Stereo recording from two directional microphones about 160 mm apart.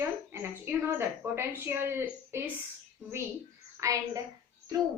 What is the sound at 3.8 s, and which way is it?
Speech, 20° right (ahead or behind).